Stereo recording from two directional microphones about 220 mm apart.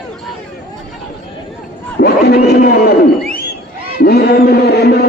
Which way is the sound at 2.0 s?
45° left (ahead or behind).